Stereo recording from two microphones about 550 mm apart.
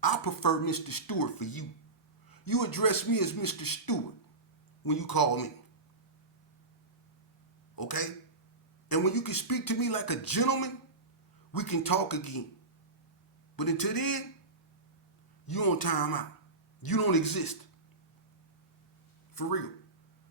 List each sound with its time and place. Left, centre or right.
0.0 s speech: left
7.8 s speech: left
13.6 s speech: left
15.4 s speech: left
19.3 s speech: left